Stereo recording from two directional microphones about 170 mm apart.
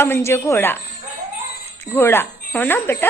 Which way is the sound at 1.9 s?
15° left (ahead or behind).